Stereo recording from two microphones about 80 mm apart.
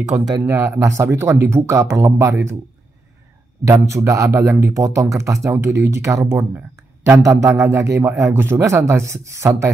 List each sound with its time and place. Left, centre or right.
0.1 s speech: centre
0.5 s speech: right
3.6 s speech: right